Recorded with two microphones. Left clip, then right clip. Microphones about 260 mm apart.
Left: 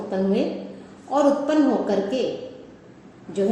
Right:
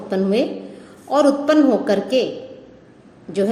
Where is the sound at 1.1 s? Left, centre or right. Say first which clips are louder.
Right 4 dB; right.